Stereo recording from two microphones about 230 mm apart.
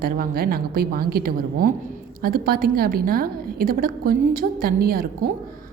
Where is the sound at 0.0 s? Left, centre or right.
Right.